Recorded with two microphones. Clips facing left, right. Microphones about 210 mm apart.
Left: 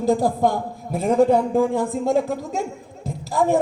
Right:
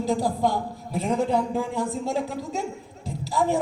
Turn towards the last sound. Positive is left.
turn(degrees=50)  # may be behind; listen again after turning